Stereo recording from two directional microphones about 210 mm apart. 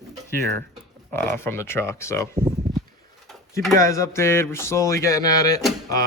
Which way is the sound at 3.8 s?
15° left (ahead or behind).